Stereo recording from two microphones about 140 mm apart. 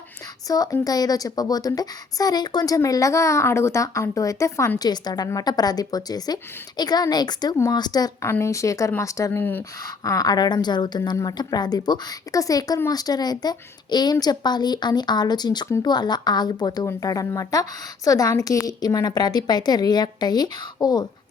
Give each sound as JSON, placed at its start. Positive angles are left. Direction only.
{"t": 0.4, "sound": "speech", "side_deg": 25}